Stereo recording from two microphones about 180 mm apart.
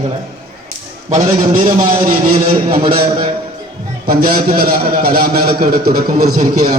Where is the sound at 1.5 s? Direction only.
45° right (ahead or behind).